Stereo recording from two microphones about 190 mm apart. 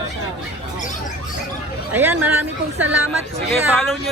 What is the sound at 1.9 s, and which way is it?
Speech, 10° right (ahead or behind).